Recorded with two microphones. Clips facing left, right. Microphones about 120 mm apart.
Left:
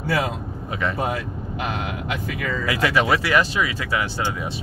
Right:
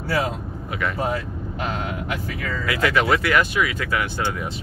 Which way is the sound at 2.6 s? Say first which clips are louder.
Even; 30° left (ahead or behind).